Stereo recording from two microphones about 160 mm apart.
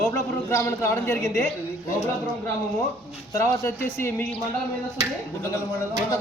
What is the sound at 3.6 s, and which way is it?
Speech, 15° left (ahead or behind).